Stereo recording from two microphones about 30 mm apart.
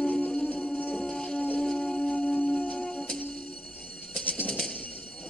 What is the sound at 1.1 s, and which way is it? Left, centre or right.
Music, left.